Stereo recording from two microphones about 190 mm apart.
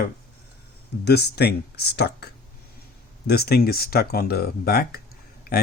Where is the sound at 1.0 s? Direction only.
60° left (ahead or behind).